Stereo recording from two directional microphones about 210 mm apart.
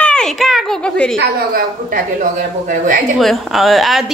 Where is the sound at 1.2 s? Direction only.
40° right (ahead or behind).